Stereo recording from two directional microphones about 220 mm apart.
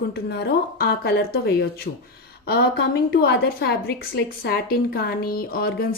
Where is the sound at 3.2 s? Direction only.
45° left (ahead or behind).